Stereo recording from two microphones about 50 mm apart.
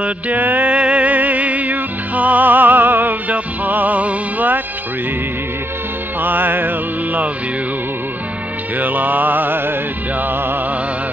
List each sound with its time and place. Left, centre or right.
0.0 s music: right
6.2 s mantra: right
8.7 s mantra: right